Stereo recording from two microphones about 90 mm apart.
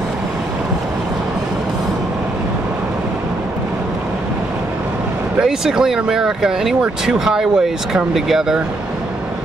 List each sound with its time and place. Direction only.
5.4 s speech: 5° right (ahead or behind)